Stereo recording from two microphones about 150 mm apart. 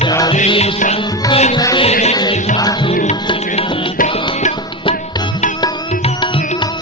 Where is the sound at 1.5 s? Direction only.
30° left (ahead or behind).